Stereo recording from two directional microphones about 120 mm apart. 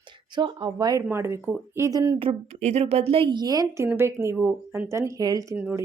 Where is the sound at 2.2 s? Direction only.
60° right (ahead or behind); by 5.4 s 30° right (ahead or behind).